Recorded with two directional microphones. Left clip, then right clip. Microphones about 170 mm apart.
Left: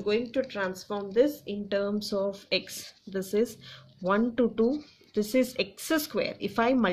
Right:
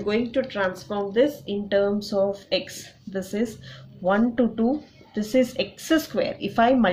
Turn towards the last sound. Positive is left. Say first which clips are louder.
# right 6 dB
turn(degrees=45)  # may be behind; listen again after turning